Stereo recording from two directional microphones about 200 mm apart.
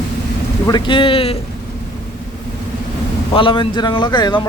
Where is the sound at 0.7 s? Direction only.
25° left (ahead or behind).